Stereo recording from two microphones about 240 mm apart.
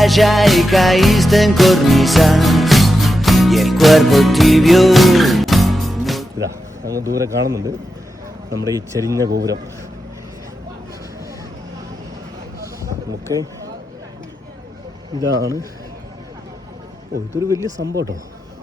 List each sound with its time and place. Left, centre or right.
0.0 s music: centre
6.4 s speech: centre
8.7 s speech: centre
12.6 s a sound: centre
17.3 s speech: centre
17.8 s speech: right